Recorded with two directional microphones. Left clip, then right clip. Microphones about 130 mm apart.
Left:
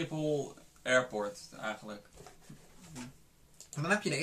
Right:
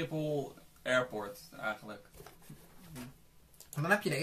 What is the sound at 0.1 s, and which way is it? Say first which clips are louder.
Speech: left 4 dB; 20° left (ahead or behind).